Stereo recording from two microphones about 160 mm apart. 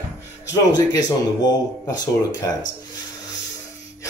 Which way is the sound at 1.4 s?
25° left (ahead or behind).